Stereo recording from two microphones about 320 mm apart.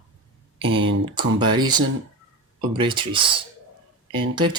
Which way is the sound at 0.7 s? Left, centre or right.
Right.